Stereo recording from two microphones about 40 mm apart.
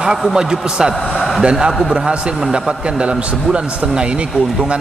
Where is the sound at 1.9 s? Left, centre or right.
Centre.